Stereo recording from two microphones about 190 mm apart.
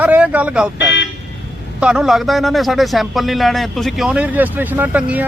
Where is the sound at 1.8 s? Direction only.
5° right (ahead or behind).